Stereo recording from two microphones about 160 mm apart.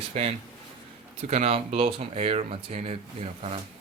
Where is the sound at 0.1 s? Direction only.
40° right (ahead or behind).